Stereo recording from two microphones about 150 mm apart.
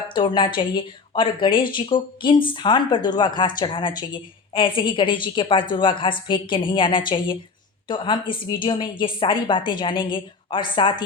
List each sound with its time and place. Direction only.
0.1 s speech: 30° left (ahead or behind)